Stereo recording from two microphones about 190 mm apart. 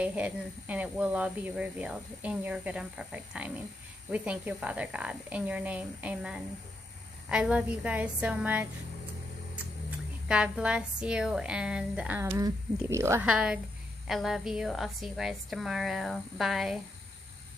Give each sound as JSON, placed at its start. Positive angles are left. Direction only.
{"t": 0.0, "sound": "speech", "side_deg": -5}
{"t": 9.8, "sound": "a woman's voice", "side_deg": -5}